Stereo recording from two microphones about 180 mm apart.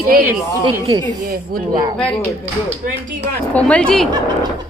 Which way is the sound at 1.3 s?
55° right (ahead or behind).